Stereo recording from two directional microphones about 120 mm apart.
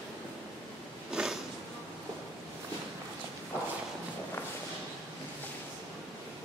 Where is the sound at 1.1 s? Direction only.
5° right (ahead or behind).